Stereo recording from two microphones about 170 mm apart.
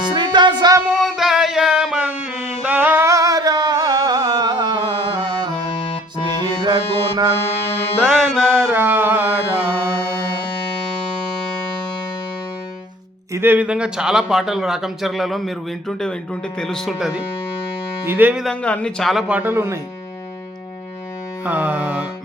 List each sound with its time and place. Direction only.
0.1 s music: 25° right (ahead or behind)
0.9 s a sound: centre (ahead or behind); by 5.5 s 25° right (ahead or behind)
6.4 s music: 25° right (ahead or behind)
8.0 s music: centre (ahead or behind)
8.5 s music: 10° right (ahead or behind)
13.3 s speech: 10° right (ahead or behind)
19.4 s music: 15° right (ahead or behind)
21.4 s music: 10° right (ahead or behind)